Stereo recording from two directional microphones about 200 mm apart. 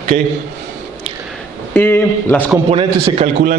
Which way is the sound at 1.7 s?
10° left (ahead or behind).